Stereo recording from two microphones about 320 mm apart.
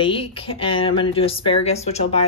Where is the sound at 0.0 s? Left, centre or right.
Centre.